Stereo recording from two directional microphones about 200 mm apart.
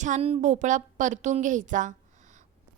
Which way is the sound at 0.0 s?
35° right (ahead or behind).